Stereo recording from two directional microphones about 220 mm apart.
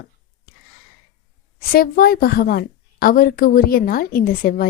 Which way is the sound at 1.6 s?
40° left (ahead or behind).